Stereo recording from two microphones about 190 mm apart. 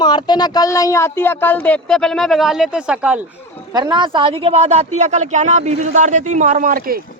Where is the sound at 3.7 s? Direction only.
20° right (ahead or behind); by 7.0 s 50° right (ahead or behind).